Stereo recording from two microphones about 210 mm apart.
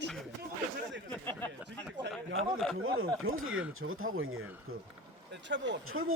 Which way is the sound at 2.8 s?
75° right (ahead or behind).